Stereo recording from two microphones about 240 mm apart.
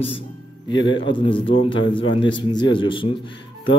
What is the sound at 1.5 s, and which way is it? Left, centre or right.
Speech, left.